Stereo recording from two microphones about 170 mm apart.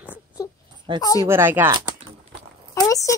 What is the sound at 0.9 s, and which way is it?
Speech, 30° right (ahead or behind).